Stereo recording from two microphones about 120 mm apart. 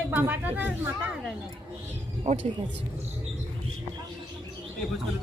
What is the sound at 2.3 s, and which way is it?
Speech, 75° right (ahead or behind).